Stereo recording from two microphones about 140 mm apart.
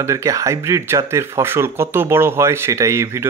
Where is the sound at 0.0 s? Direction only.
20° right (ahead or behind).